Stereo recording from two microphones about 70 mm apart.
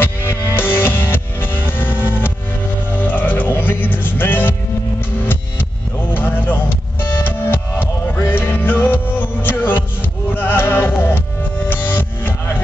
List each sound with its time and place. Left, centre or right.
0.0 s music: left
6.1 s vehicle: left
7.0 s music: left